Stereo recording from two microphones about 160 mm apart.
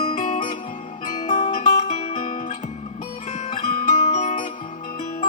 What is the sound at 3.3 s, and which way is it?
Music, 40° left (ahead or behind).